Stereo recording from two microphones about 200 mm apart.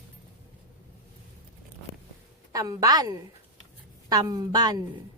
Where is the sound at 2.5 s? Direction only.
15° right (ahead or behind).